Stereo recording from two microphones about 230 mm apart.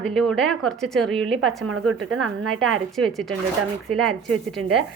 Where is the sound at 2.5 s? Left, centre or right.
Centre.